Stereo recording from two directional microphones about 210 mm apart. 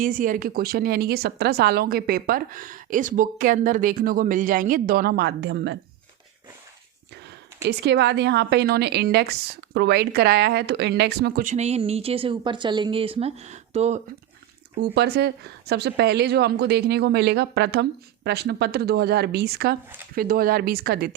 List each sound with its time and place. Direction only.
0.0 s speech: 40° right (ahead or behind)
7.3 s speech: 55° right (ahead or behind)
11.5 s speech: 30° right (ahead or behind)
14.8 s speech: 50° right (ahead or behind)